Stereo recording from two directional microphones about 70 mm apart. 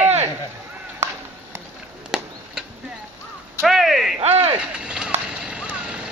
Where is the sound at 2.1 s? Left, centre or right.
Centre.